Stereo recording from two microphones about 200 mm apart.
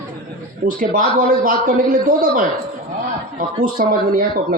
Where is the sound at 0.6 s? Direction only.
40° right (ahead or behind).